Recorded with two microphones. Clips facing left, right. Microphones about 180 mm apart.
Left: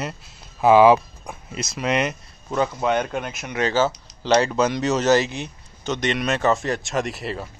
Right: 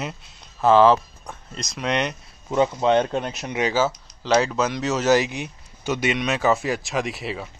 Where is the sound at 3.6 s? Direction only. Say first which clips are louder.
Left 1 dB; 10° right (ahead or behind).